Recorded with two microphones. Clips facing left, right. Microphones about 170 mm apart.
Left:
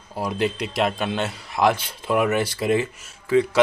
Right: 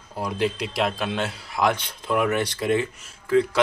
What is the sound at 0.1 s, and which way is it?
A man's voice, centre (ahead or behind).